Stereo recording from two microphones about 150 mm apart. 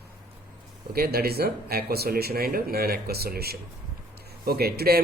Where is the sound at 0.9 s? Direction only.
90° right.